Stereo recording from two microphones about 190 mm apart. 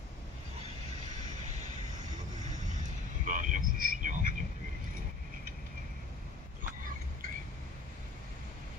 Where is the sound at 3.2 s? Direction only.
45° right (ahead or behind).